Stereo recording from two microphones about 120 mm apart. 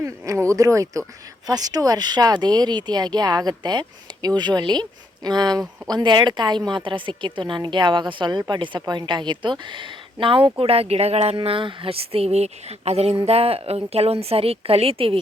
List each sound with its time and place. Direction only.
0.0 s a woman's voice: 25° right (ahead or behind); by 11.3 s 60° right (ahead or behind)
11.3 s speech: 45° right (ahead or behind)